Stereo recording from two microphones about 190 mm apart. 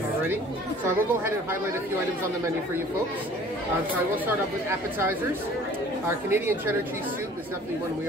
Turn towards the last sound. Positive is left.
turn(degrees=-10)  # may be behind; listen again after turning